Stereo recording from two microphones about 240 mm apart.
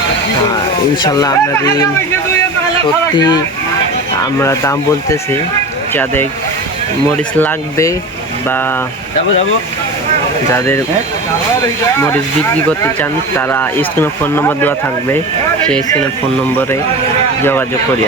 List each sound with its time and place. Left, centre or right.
1.0 s speech: centre
3.2 s speech: centre
7.3 s speech: centre
11.6 s speech: centre
13.5 s speech: centre